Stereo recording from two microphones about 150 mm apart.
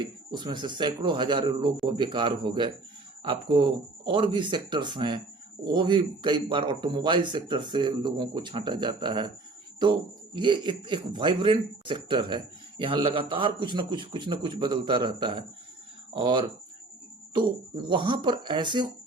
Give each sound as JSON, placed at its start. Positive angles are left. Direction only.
{"t": 0.0, "sound": "a man's voice", "side_deg": -30}